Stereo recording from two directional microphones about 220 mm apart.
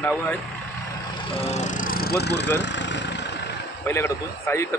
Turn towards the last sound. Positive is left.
turn(degrees=10)  # may be behind; listen again after turning